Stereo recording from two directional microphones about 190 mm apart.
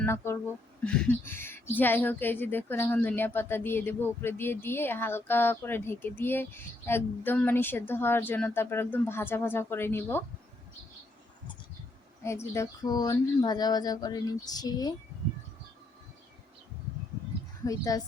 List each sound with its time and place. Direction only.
0.0 s a woman's voice: 15° left (ahead or behind)
0.9 s a sound: 10° left (ahead or behind)
1.7 s a woman's voice: 10° left (ahead or behind)
12.2 s speech: 15° left (ahead or behind)
17.7 s speech: 20° left (ahead or behind)